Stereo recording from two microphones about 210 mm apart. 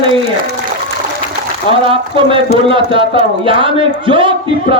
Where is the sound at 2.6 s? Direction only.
25° right (ahead or behind).